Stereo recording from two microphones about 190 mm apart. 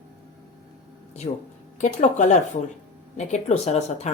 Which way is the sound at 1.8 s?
40° left (ahead or behind).